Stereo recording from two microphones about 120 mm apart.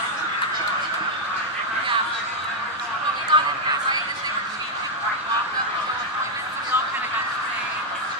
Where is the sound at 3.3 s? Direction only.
40° right (ahead or behind).